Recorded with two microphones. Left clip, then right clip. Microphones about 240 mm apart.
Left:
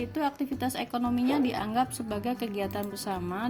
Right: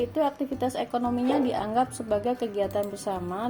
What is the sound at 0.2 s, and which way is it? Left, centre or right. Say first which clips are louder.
Speech: right 2 dB; left.